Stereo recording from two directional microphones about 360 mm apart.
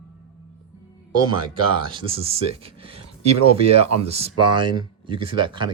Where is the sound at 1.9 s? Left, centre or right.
Centre.